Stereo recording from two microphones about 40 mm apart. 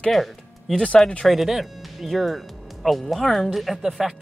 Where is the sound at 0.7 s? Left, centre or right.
Left.